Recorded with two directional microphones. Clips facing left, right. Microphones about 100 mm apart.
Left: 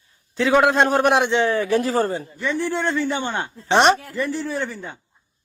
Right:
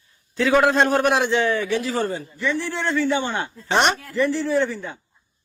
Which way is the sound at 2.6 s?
15° left (ahead or behind).